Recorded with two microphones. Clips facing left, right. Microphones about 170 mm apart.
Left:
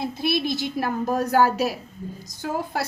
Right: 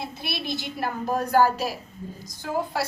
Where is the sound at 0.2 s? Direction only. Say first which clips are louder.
Left 9 dB; 45° left (ahead or behind).